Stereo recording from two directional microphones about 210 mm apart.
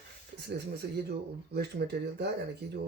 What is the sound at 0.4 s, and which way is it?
Speech, 50° right (ahead or behind).